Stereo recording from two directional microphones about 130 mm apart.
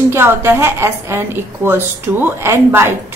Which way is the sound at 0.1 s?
20° right (ahead or behind).